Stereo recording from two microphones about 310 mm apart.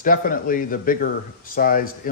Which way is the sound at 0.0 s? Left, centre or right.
Left.